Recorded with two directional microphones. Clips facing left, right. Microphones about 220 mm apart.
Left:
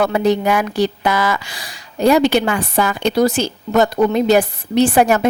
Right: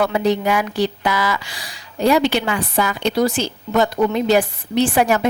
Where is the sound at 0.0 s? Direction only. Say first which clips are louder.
Left 2 dB; 45° left (ahead or behind).